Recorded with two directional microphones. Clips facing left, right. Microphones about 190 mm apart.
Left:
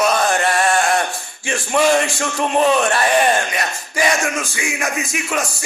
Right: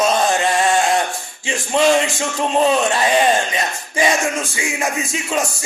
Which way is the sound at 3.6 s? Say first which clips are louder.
Right 1 dB; 25° right (ahead or behind).